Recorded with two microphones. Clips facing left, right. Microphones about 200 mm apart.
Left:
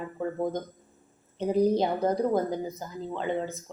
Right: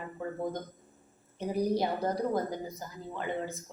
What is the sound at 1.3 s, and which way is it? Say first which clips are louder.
A woman's voice: left 6 dB; 20° left (ahead or behind).